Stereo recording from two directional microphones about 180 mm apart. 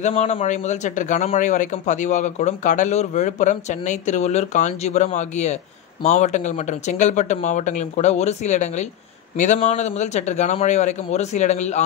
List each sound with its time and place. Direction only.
0.0 s speech: 40° left (ahead or behind)